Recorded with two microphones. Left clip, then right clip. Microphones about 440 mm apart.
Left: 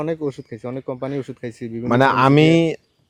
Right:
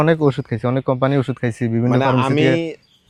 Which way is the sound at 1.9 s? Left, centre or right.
Left.